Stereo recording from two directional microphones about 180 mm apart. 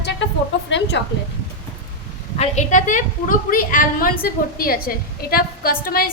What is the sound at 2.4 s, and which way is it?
A woman's voice, 40° left (ahead or behind).